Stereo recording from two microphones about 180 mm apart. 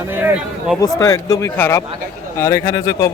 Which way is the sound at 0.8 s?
20° left (ahead or behind).